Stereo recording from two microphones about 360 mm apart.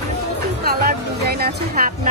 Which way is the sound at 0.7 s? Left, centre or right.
Right.